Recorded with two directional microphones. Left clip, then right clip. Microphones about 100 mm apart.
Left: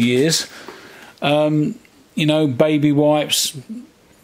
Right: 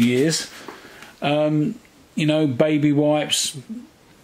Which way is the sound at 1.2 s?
40° left (ahead or behind).